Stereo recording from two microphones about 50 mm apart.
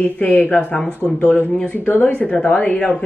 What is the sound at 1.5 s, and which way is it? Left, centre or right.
Speech, left.